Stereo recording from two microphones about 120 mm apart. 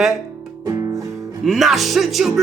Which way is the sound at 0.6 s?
30° right (ahead or behind).